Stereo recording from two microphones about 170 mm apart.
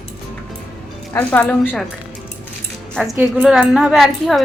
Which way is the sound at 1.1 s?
10° left (ahead or behind).